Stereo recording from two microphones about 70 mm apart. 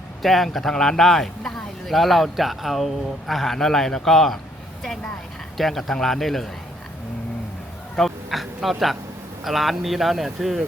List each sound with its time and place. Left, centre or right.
0.2 s speech: centre
5.5 s speech: centre
7.9 s speech: centre